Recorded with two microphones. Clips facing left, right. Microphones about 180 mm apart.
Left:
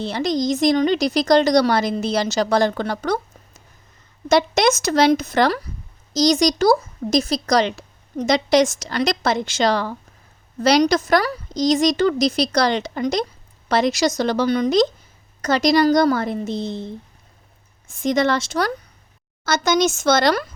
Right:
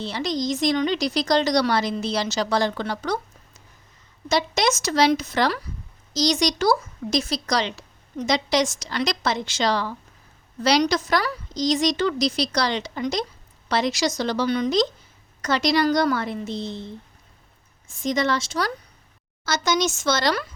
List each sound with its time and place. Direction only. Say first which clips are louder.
0.0 s speech: left 5 dB; 50° left (ahead or behind)
4.3 s speech: left 6 dB; 55° left (ahead or behind)
18.0 s speech: left 4 dB; 60° left (ahead or behind)